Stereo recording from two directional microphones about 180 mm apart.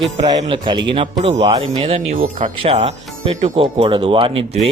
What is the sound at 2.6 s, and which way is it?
Speech, 35° right (ahead or behind).